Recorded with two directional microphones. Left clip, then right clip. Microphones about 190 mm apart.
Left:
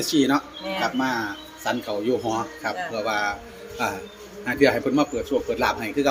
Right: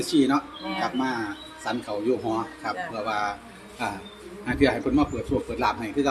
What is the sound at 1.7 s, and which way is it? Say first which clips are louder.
A man's voice: left 2 dB; 40° left (ahead or behind).